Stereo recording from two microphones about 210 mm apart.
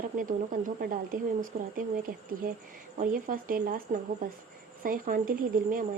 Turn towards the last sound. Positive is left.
turn(degrees=-40)  # may be behind; listen again after turning